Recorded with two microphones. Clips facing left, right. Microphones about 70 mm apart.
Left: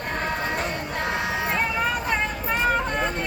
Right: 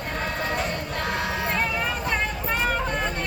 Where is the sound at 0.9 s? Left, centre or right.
Centre.